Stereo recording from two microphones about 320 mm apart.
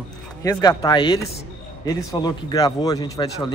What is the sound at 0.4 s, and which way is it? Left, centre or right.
A man's voice, centre.